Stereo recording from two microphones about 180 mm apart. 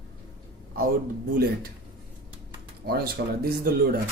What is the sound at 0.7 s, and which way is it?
Speech, 55° right (ahead or behind).